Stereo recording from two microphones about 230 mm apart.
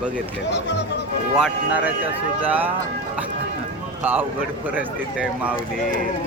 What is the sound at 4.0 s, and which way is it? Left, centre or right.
Speech, centre.